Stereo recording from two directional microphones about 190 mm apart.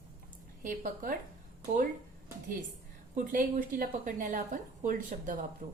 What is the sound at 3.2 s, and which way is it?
A woman's voice, 45° right (ahead or behind).